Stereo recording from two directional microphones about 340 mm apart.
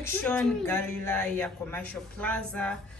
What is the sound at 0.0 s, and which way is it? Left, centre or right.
Speech, centre.